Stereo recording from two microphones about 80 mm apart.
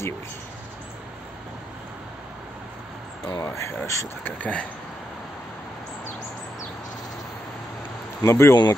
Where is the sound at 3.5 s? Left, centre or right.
Left.